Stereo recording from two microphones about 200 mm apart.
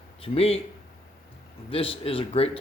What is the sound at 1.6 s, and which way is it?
Speech, 30° left (ahead or behind).